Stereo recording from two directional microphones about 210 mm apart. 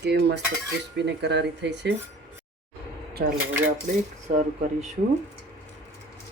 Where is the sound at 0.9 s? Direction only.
55° right (ahead or behind).